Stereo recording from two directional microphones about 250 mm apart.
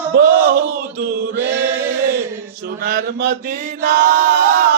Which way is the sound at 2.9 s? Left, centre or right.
Right.